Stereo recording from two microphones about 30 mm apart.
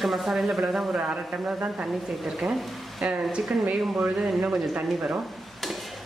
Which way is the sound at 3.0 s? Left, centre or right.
Right.